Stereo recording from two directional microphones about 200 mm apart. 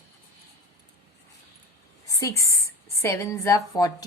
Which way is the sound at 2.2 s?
15° left (ahead or behind).